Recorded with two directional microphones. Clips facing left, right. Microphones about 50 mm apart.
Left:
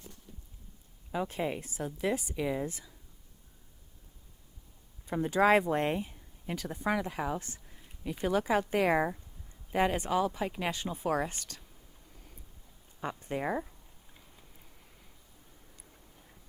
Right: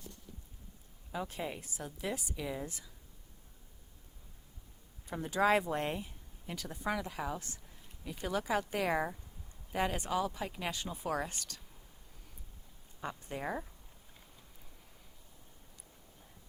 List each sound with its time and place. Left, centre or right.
1.1 s a woman's voice: left
5.1 s a woman's voice: left
11.3 s speech: left
13.0 s a woman's voice: left